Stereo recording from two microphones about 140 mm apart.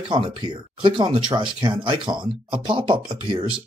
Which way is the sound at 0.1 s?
35° right (ahead or behind).